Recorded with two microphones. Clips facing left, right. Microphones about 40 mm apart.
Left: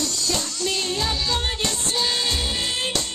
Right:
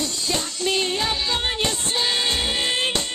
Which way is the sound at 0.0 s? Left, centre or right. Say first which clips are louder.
Even; right.